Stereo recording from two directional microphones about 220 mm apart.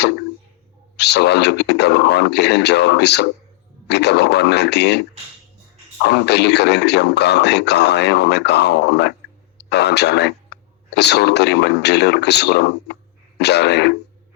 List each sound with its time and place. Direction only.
0.9 s a man's voice: 50° left (ahead or behind)